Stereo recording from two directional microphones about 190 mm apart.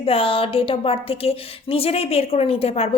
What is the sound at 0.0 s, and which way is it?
A woman's voice, 30° left (ahead or behind).